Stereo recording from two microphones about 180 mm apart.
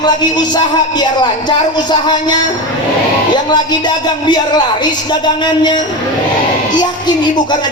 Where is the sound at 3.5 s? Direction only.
25° left (ahead or behind).